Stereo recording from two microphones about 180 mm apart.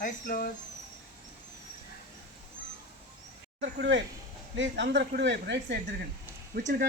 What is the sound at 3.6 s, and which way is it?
Speech, 75° right (ahead or behind).